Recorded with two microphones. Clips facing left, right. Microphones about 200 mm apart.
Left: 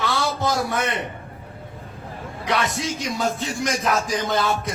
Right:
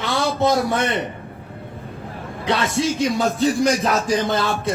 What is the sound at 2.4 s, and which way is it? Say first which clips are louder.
Speech: right 4 dB; 25° right (ahead or behind).